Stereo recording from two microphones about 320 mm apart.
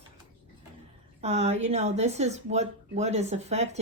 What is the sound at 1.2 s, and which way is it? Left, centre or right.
Speech, centre.